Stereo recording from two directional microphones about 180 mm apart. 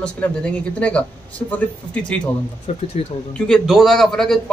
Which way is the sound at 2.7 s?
35° left (ahead or behind).